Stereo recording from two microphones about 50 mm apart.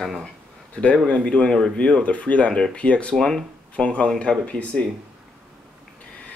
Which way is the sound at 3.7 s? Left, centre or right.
Left.